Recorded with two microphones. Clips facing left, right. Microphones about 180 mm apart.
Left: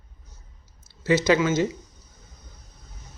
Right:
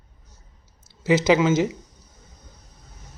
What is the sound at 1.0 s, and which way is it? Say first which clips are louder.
Speech: right 2 dB; 20° right (ahead or behind).